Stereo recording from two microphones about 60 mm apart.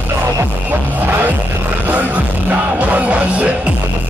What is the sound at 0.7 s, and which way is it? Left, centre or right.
Music, right.